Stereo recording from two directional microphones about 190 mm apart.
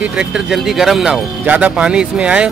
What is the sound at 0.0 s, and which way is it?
Speech, 5° right (ahead or behind).